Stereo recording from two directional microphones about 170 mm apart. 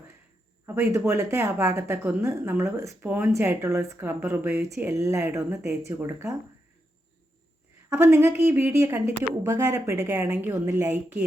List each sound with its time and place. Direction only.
0.6 s speech: 15° right (ahead or behind)
7.9 s speech: 15° right (ahead or behind)